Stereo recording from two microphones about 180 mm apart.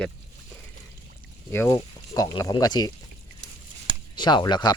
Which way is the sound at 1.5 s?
15° left (ahead or behind).